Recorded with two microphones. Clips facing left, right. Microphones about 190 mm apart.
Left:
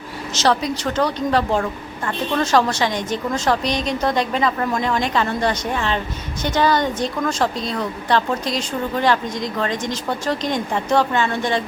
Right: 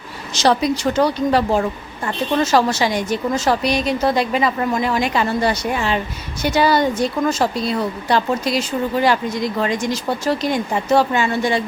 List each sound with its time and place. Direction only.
0.3 s a woman's voice: 15° right (ahead or behind)